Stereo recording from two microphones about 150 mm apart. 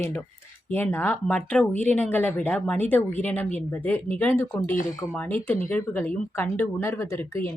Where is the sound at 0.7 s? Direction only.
15° left (ahead or behind).